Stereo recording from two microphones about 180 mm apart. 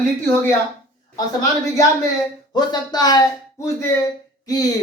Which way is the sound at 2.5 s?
20° left (ahead or behind).